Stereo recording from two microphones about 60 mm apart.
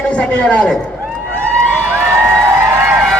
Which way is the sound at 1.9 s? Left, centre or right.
Right.